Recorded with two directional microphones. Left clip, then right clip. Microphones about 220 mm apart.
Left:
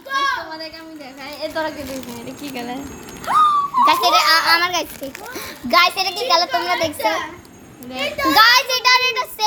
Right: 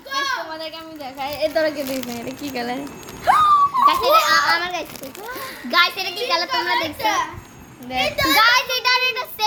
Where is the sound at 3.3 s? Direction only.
35° right (ahead or behind).